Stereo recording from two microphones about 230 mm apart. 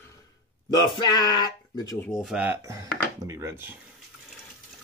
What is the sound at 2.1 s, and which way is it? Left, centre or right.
Speech, centre.